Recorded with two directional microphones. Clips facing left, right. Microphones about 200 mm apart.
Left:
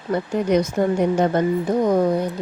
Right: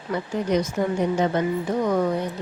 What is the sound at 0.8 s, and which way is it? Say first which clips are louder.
A woman's voice: left 4 dB; 55° left (ahead or behind).